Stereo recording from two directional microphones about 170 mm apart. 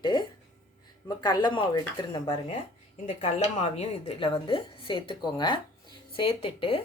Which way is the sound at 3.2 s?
40° left (ahead or behind).